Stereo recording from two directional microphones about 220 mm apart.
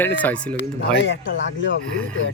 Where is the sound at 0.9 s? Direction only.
55° left (ahead or behind).